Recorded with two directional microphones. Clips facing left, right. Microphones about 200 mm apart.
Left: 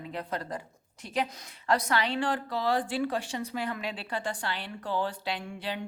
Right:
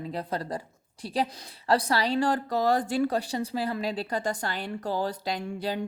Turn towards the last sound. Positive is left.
turn(degrees=-40)  # may be behind; listen again after turning